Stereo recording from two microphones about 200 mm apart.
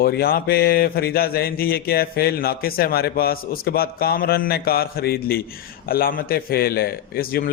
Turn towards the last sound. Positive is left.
turn(degrees=45)  # may be behind; listen again after turning